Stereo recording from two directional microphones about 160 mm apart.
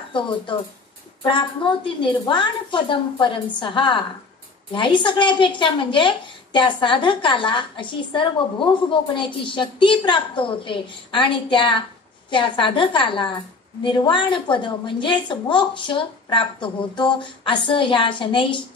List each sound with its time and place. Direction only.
1.2 s a woman's voice: 30° left (ahead or behind)